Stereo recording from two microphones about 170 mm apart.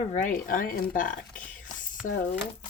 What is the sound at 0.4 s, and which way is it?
Speech, 55° left (ahead or behind).